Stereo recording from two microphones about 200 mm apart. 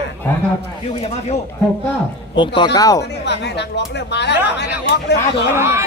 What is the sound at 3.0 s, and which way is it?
Speech, 60° left (ahead or behind).